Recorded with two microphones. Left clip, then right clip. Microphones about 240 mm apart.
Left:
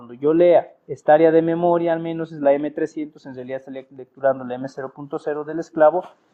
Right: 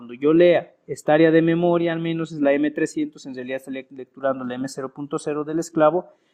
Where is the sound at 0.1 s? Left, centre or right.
Right.